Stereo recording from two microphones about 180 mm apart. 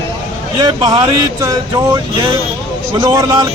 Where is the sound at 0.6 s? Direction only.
20° right (ahead or behind).